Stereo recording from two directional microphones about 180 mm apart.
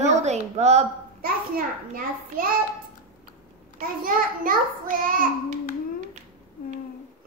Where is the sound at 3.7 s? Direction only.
50° right (ahead or behind).